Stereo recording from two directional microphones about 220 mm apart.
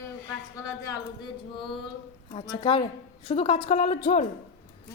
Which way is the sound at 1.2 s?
20° left (ahead or behind).